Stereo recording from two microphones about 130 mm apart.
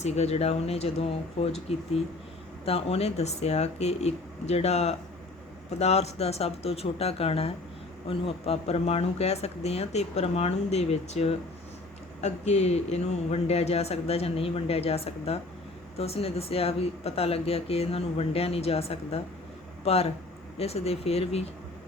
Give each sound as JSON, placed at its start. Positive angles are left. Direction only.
{"t": 0.0, "sound": "speech", "side_deg": 55}